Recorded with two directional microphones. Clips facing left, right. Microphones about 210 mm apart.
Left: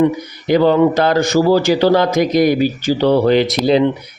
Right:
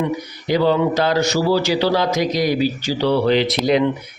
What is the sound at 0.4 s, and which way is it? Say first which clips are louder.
Speech: left 5 dB; 55° left (ahead or behind).